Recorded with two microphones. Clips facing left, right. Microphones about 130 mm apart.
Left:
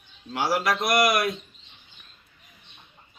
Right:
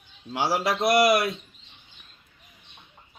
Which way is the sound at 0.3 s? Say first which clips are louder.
Even; 25° right (ahead or behind).